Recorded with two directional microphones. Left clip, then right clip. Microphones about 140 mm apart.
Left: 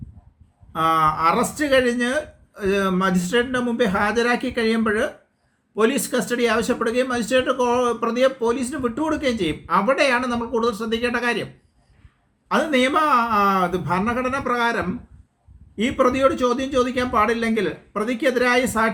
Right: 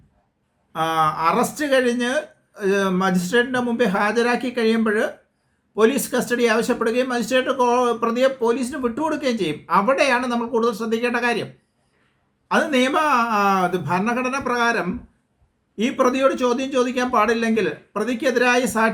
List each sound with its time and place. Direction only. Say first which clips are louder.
0.7 s speech: left 2 dB; 10° right (ahead or behind)
12.5 s speech: even; 15° right (ahead or behind)